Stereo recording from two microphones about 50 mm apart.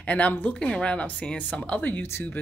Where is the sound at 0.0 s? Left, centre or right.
Left.